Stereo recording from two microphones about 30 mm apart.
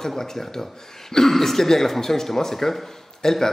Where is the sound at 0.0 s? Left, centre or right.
Centre.